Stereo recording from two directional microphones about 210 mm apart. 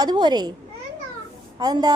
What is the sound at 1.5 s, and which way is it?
Speech, 20° right (ahead or behind).